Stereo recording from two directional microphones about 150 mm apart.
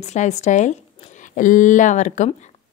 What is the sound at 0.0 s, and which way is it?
A woman's voice, 50° left (ahead or behind).